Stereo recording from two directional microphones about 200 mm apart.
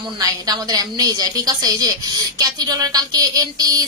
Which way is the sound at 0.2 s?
20° right (ahead or behind).